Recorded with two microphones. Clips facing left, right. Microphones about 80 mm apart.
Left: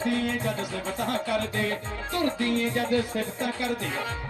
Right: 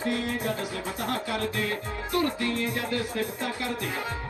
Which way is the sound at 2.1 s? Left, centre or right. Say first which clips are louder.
Left 1 dB; left.